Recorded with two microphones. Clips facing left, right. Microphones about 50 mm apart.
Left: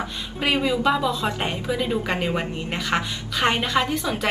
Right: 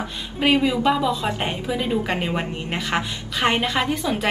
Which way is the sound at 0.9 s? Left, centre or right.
Centre.